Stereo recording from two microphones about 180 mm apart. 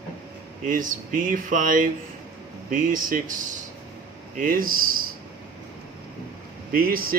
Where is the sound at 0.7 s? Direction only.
50° right (ahead or behind).